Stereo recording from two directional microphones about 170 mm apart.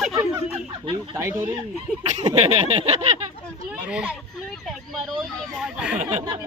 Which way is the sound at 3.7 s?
5° right (ahead or behind).